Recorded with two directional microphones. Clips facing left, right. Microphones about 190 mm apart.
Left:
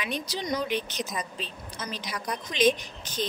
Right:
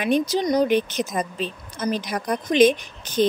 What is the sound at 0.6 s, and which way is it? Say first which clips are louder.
Speech: right 10 dB; 50° right (ahead or behind).